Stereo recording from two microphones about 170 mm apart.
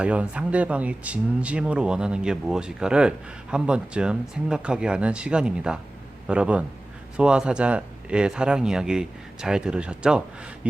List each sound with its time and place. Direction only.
0.0 s a man's voice: 5° right (ahead or behind)